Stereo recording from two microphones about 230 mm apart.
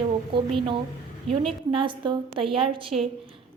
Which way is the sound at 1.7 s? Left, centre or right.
Right.